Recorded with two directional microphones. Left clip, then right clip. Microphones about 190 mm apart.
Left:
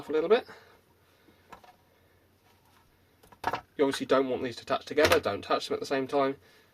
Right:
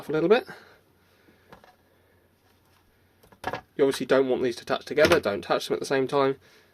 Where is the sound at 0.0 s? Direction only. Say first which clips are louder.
Right 3 dB; 50° right (ahead or behind).